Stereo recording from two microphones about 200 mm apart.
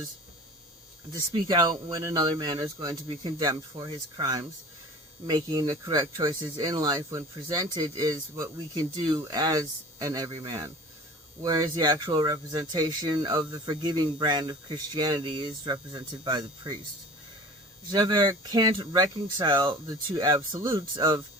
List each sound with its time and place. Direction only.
1.5 s speech: 20° right (ahead or behind)
17.9 s speech: 20° right (ahead or behind)